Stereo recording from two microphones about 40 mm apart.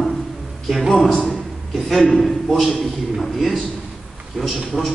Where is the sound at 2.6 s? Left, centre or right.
Centre.